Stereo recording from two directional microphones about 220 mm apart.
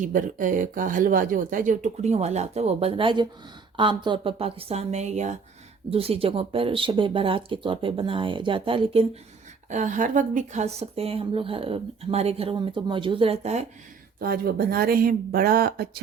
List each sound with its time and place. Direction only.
0.0 s speech: 35° right (ahead or behind)
14.2 s speech: 45° right (ahead or behind)